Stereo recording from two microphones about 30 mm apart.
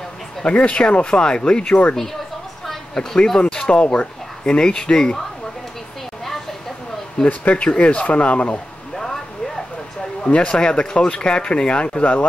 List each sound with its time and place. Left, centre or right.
0.5 s speech: left
2.9 s speech: centre
3.3 s speech: left
7.2 s speech: left
7.6 s speech: left
8.9 s a sound: centre
10.2 s speech: left